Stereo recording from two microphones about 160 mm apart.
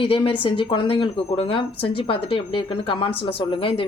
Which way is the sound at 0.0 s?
35° left (ahead or behind).